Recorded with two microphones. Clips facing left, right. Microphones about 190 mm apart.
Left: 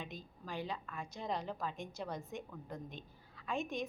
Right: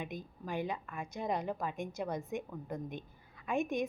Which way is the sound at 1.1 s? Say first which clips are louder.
Right 5 dB; 50° right (ahead or behind).